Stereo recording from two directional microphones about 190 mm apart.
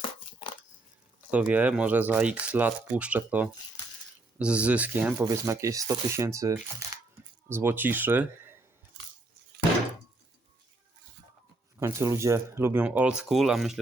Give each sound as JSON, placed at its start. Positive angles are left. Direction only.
{"t": 0.0, "sound": "chopping", "side_deg": 30}
{"t": 1.3, "sound": "speech", "side_deg": -10}
{"t": 6.8, "sound": "a sound", "side_deg": -15}
{"t": 7.5, "sound": "speech", "side_deg": -10}
{"t": 11.8, "sound": "speech", "side_deg": -15}